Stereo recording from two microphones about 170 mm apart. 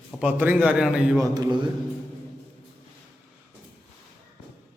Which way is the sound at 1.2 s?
20° right (ahead or behind).